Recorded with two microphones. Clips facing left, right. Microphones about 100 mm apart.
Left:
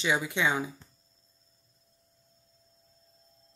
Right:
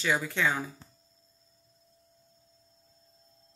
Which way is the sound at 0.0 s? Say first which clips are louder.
Even; 15° left (ahead or behind).